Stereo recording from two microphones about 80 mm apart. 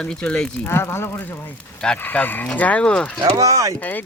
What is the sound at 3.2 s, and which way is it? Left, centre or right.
Speech, right.